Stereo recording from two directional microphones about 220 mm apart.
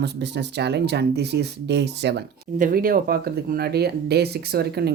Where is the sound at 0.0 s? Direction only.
50° right (ahead or behind).